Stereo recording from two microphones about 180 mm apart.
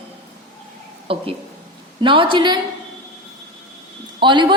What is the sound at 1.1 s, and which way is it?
A woman's voice, 30° right (ahead or behind).